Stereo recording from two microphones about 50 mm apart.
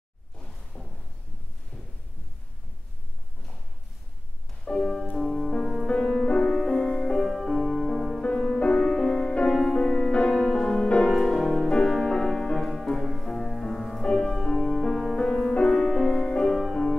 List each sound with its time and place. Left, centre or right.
0.7 s a sound: left
4.6 s music: centre
8.2 s music: centre
10.7 s music: centre
11.1 s music: centre
11.9 s music: centre
13.2 s music: centre